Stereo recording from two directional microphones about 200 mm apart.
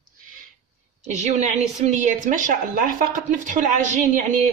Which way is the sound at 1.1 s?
35° right (ahead or behind).